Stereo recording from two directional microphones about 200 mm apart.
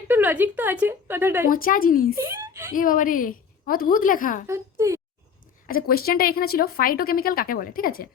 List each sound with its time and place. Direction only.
0.1 s speech: 10° right (ahead or behind)
1.5 s speech: 45° left (ahead or behind)
2.1 s speech: 15° right (ahead or behind)
2.7 s speech: 45° left (ahead or behind)
4.4 s a child's voice: 15° right (ahead or behind)
5.6 s speech: 45° left (ahead or behind)